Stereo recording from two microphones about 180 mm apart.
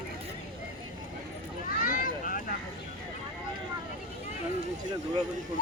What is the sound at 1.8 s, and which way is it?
Vehicle, 50° left (ahead or behind).